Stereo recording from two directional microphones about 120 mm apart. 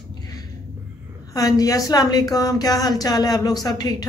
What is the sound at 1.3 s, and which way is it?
Speech, 30° left (ahead or behind).